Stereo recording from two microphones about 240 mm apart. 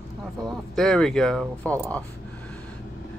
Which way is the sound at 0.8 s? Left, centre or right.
Centre.